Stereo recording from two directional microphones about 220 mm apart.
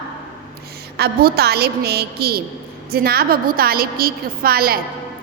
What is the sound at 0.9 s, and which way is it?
A woman's voice, 45° right (ahead or behind).